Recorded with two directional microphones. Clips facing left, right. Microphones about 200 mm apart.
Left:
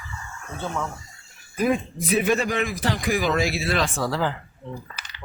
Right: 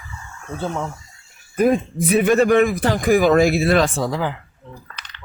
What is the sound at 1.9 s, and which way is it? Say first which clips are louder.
A man's voice: right 6 dB; 55° right (ahead or behind).